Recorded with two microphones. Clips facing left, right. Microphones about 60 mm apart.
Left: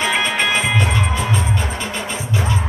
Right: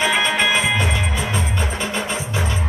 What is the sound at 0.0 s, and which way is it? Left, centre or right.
Music, centre.